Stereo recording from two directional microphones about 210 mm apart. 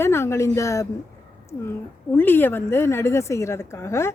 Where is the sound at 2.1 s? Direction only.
10° left (ahead or behind).